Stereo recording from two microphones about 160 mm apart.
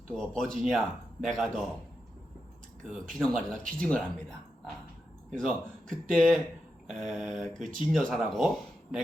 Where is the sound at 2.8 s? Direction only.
Centre (ahead or behind).